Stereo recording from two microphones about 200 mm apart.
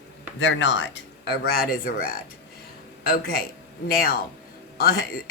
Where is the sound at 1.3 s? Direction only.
55° left (ahead or behind).